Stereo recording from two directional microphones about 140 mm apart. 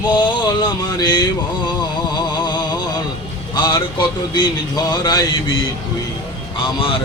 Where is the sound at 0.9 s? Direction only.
30° left (ahead or behind).